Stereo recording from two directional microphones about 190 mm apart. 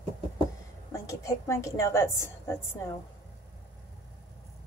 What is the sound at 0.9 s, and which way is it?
A woman's voice, 15° left (ahead or behind).